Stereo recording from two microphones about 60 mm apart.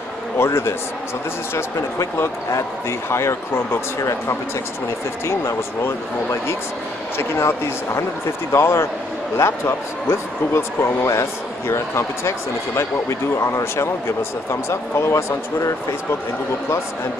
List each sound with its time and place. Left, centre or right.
0.4 s speech: left
2.9 s speech: left
7.2 s speech: left
14.5 s speech: left